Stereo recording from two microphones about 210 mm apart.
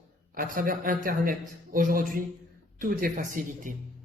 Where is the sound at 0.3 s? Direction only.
40° right (ahead or behind).